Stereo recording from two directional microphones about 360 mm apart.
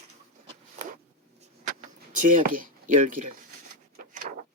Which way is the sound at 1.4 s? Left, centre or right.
Right.